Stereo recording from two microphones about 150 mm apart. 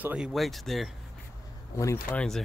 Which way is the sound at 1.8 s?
20° left (ahead or behind).